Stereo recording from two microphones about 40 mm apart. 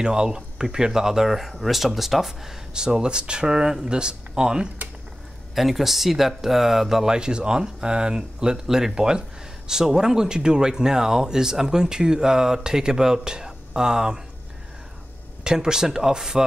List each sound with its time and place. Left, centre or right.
0.0 s speech: centre
2.7 s speech: centre
5.5 s speech: centre
7.1 s speech: right
15.4 s speech: centre